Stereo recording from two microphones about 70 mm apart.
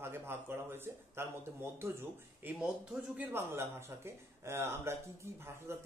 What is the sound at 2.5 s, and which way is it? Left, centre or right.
Speech, centre.